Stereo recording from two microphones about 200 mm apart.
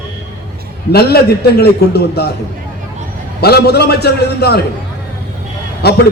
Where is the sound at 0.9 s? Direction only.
50° left (ahead or behind).